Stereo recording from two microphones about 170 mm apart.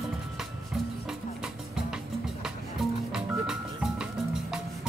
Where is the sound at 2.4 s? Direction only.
Centre (ahead or behind).